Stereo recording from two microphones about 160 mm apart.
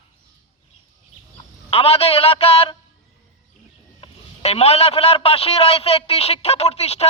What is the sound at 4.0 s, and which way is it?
A man's voice, 40° left (ahead or behind).